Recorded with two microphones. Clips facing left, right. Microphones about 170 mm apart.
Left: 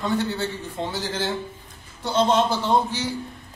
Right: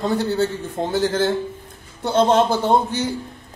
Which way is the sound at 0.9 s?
50° right (ahead or behind).